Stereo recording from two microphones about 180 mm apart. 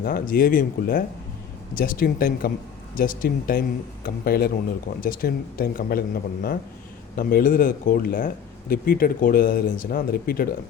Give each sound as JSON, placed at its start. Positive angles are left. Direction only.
{"t": 0.0, "sound": "speech", "side_deg": 50}